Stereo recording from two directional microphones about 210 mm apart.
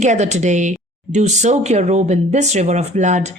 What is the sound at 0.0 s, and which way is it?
A woman's voice, 35° right (ahead or behind).